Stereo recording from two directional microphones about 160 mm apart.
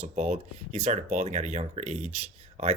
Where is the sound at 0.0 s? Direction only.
45° right (ahead or behind).